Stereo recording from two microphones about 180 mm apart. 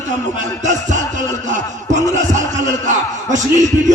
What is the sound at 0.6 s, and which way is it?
A man's voice, 45° right (ahead or behind).